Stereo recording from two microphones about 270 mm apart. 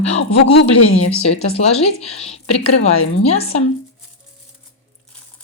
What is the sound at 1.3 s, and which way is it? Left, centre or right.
Speech, left.